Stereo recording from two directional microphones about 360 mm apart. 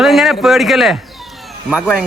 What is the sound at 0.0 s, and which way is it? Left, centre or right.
A man's voice, centre.